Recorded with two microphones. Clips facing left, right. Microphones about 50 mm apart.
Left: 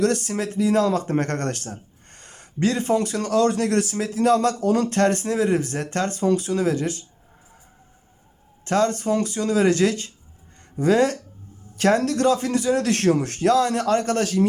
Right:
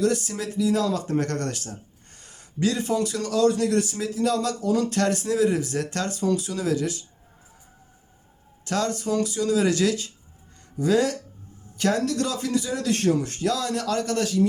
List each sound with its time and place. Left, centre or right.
0.0 s speech: left
8.6 s speech: left
13.5 s speech: left